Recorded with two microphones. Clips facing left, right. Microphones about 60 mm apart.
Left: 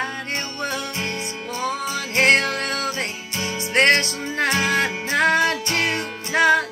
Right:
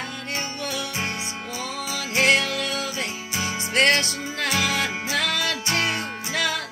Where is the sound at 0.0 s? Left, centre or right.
Left.